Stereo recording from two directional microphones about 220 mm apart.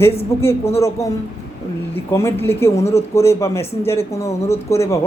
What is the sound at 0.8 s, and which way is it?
Speech, 15° left (ahead or behind).